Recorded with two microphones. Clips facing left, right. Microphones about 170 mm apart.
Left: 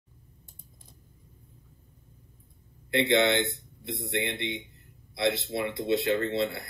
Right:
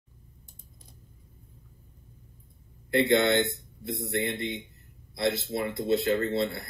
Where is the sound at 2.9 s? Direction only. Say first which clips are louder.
Right 1 dB; 45° right (ahead or behind).